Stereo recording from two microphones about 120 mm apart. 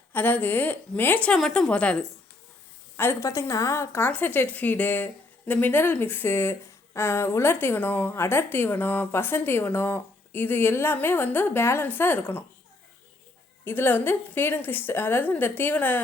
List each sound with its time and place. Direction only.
0.1 s a woman's voice: 15° left (ahead or behind)
3.0 s a woman's voice: 20° left (ahead or behind)
13.7 s a woman's voice: 15° left (ahead or behind)